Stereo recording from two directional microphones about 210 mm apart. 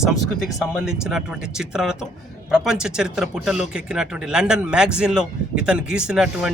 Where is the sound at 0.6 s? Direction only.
Centre (ahead or behind).